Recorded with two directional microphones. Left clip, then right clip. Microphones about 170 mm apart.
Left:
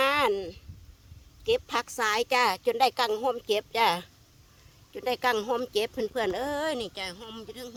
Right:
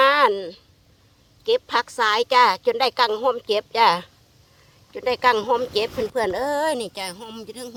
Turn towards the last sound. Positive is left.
turn(degrees=-45)  # may be behind; listen again after turning